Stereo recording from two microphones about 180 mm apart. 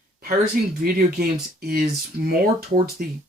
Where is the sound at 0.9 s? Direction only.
55° right (ahead or behind).